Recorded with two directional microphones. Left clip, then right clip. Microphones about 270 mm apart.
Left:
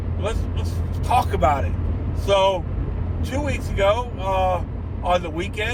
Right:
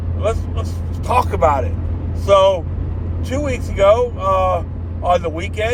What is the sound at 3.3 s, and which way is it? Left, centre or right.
Speech, centre.